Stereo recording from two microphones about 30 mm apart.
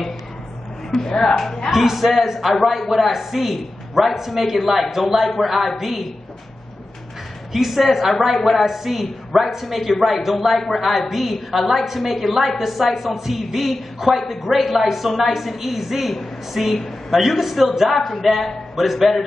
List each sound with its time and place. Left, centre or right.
0.9 s speech: centre
1.7 s a woman's voice: centre
7.5 s a woman's voice: centre